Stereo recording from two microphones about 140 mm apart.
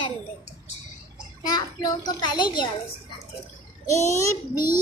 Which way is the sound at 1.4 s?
30° left (ahead or behind).